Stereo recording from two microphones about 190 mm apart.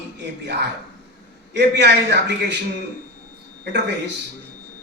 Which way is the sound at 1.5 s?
65° right (ahead or behind).